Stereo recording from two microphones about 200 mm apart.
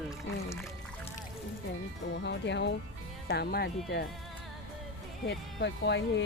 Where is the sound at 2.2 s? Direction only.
60° left (ahead or behind).